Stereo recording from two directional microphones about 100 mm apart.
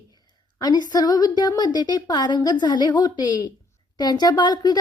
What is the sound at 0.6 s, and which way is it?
A woman's voice, 45° left (ahead or behind).